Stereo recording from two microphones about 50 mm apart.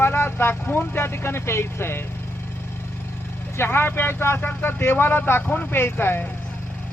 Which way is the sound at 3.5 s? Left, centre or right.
Left.